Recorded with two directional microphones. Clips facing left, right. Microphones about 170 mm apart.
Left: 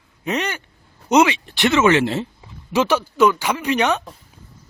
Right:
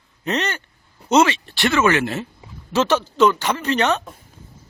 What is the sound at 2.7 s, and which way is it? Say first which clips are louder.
Speech: even; 10° left (ahead or behind).